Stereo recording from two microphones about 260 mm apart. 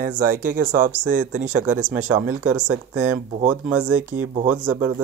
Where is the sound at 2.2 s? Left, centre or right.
Centre.